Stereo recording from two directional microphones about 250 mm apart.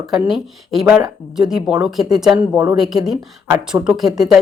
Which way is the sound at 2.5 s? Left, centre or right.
Centre.